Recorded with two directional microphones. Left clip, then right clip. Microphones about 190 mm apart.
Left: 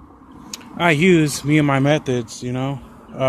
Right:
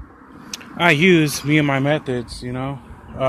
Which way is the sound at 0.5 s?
Centre (ahead or behind).